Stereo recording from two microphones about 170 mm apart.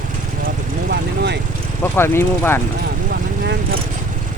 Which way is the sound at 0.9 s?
75° right (ahead or behind).